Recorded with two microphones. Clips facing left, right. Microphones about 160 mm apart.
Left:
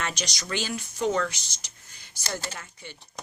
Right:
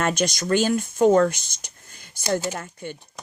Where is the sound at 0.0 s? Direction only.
50° right (ahead or behind).